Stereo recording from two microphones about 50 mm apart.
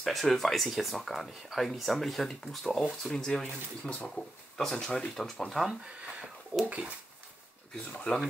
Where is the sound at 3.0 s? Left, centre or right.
Centre.